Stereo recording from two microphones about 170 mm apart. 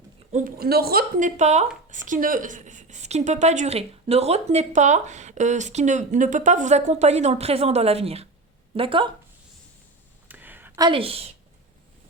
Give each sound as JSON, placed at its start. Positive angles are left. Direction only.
{"t": 0.3, "sound": "a woman's voice", "side_deg": -50}
{"t": 10.2, "sound": "a sound", "side_deg": -10}
{"t": 10.8, "sound": "a woman's voice", "side_deg": -30}